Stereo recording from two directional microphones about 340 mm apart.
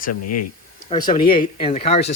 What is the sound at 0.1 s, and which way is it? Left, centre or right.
Speech, left.